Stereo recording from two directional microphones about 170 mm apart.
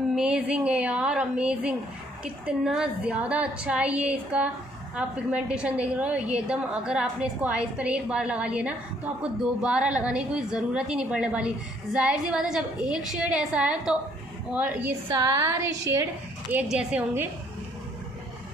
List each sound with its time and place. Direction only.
0.1 s a woman's voice: 5° right (ahead or behind)
15.0 s a woman's voice: 25° right (ahead or behind)
16.7 s a woman's voice: 10° right (ahead or behind)